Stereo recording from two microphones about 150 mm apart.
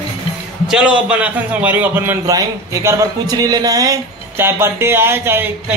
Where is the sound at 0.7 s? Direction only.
5° right (ahead or behind).